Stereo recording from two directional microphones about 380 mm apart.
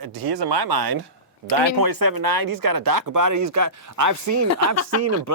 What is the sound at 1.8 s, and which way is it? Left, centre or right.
Speech, right.